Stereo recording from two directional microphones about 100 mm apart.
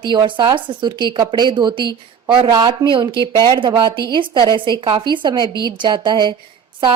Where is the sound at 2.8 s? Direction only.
55° right (ahead or behind).